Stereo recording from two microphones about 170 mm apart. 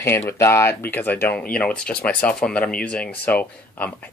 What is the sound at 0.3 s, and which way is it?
Speech, 15° left (ahead or behind).